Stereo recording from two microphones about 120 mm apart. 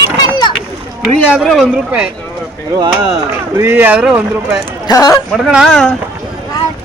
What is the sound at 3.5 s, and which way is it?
Speech, 20° right (ahead or behind).